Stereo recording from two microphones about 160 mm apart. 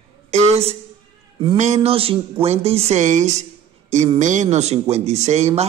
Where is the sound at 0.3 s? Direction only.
45° right (ahead or behind).